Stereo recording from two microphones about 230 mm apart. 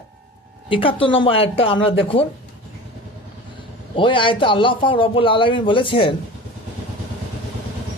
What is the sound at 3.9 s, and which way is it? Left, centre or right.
A man's voice, left.